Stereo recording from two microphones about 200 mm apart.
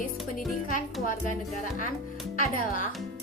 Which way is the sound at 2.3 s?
45° left (ahead or behind).